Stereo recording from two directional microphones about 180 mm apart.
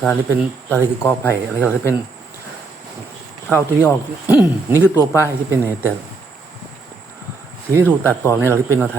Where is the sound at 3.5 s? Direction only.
10° left (ahead or behind).